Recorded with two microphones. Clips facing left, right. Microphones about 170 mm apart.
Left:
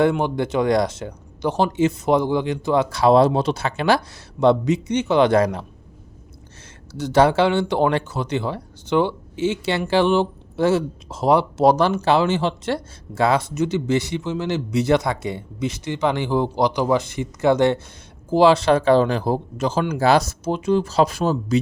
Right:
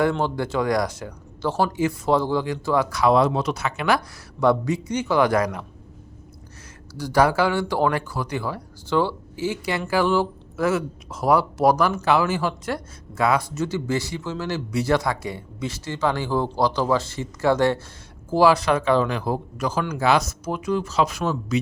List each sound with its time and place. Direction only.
0.0 s speech: 20° left (ahead or behind)
6.9 s speech: 25° left (ahead or behind)